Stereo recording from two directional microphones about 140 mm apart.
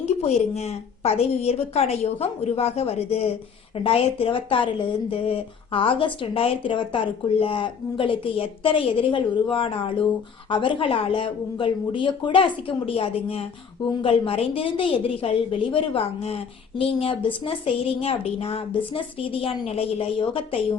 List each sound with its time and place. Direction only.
0.0 s a woman's voice: 50° left (ahead or behind)